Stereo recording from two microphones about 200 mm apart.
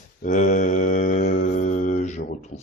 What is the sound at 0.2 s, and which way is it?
Mantra, 40° left (ahead or behind).